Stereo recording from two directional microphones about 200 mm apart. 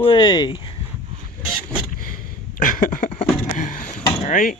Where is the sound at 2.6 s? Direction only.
40° left (ahead or behind).